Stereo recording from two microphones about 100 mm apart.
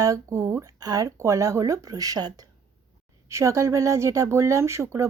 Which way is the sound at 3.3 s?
30° right (ahead or behind).